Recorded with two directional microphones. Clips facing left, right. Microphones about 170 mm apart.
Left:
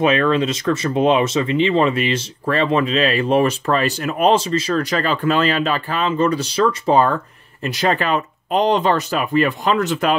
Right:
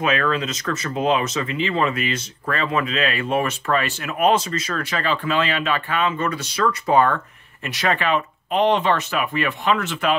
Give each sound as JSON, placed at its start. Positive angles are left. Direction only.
{"t": 0.0, "sound": "speech", "side_deg": 25}